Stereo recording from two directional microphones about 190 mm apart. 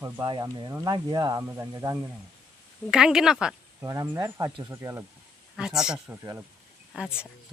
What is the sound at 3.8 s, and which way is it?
Speech, 15° right (ahead or behind).